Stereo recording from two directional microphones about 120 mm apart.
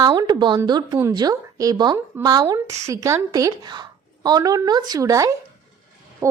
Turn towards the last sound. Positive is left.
turn(degrees=-25)  # may be behind; listen again after turning